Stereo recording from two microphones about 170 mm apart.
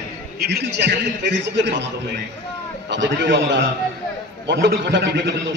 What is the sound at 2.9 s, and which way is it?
A man's voice, 90° right.